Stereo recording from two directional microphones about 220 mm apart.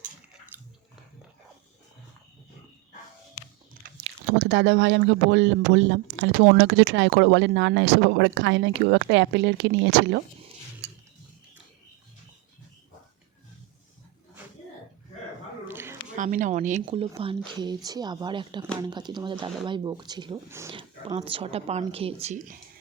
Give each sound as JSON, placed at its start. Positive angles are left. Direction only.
{"t": 0.5, "sound": "biting", "side_deg": -10}
{"t": 4.0, "sound": "speech", "side_deg": -55}
{"t": 15.6, "sound": "squish", "side_deg": -10}
{"t": 16.1, "sound": "a woman's voice", "side_deg": -35}